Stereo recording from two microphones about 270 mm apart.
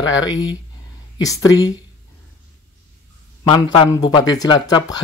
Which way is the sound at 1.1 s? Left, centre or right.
Centre.